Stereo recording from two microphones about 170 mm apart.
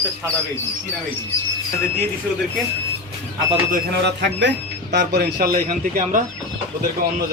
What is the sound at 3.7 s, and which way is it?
Speech, 80° right.